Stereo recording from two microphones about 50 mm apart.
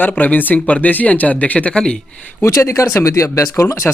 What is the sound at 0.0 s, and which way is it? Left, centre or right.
Speech, left.